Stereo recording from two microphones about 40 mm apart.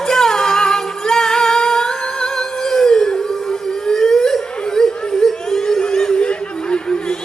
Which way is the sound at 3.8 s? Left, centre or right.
Centre.